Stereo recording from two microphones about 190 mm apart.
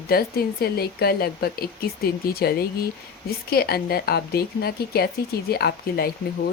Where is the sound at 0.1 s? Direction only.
55° left (ahead or behind).